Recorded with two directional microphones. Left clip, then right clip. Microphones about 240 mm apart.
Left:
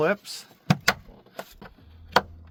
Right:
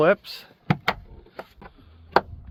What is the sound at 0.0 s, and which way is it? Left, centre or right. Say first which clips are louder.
Speech: right 5 dB; right.